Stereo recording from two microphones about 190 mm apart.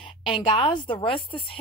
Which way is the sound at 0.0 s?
25° left (ahead or behind).